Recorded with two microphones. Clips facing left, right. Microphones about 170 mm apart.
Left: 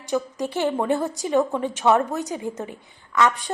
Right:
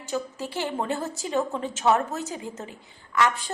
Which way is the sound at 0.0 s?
15° left (ahead or behind).